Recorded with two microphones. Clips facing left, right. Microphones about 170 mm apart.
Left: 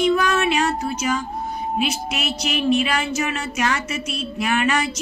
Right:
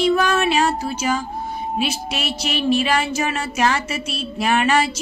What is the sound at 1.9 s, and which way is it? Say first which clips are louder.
Music: even; 30° right (ahead or behind).